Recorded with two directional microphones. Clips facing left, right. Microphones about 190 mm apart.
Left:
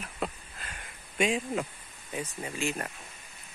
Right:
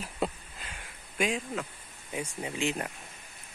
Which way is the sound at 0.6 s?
10° right (ahead or behind).